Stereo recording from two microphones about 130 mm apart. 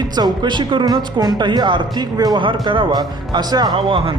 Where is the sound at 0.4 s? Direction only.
35° right (ahead or behind).